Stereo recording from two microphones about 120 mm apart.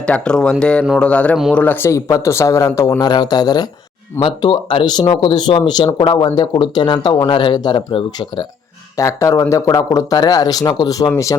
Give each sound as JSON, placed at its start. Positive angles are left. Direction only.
{"t": 0.0, "sound": "speech", "side_deg": 10}
{"t": 9.0, "sound": "speech", "side_deg": 25}